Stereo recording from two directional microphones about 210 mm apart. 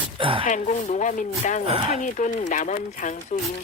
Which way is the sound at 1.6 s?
25° right (ahead or behind).